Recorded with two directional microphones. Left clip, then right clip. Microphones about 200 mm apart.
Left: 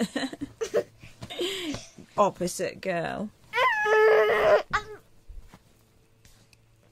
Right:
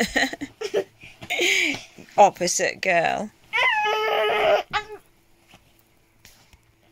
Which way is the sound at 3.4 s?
15° left (ahead or behind).